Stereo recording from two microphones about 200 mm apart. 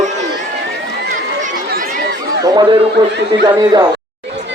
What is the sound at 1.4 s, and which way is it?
Chatter, 40° right (ahead or behind).